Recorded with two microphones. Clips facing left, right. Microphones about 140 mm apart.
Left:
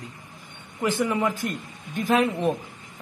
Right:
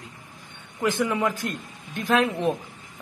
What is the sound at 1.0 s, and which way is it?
A woman's voice, 10° left (ahead or behind).